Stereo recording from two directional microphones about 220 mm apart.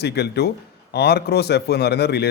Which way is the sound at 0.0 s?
45° left (ahead or behind).